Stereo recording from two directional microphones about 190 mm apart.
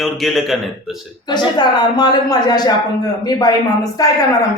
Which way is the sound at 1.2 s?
20° left (ahead or behind).